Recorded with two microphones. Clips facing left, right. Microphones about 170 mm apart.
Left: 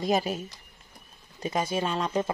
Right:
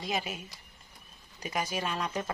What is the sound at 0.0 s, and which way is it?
Speech, 40° left (ahead or behind).